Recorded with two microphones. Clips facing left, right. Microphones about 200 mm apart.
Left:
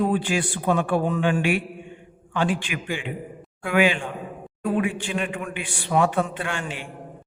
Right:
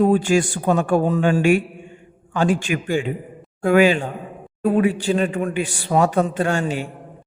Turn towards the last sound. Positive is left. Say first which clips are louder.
# right 9 dB
turn(degrees=-40)  # may be behind; listen again after turning